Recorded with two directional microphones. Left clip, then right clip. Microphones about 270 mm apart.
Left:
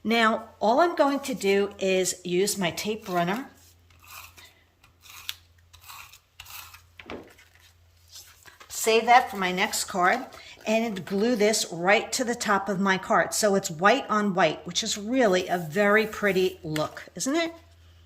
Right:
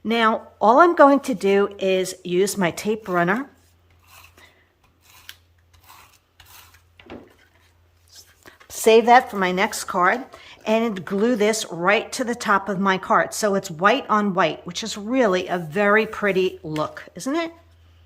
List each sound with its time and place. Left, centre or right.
0.0 s speech: centre
8.1 s a sound: centre
8.4 s speech: right; by 17.5 s centre